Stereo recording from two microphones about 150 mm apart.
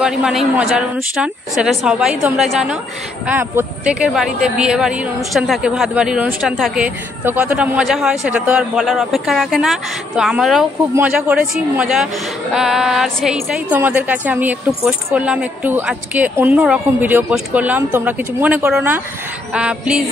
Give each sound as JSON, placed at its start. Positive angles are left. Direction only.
{"t": 0.0, "sound": "a woman's voice", "side_deg": -5}